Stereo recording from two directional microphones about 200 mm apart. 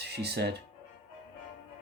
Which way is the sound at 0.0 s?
55° right (ahead or behind).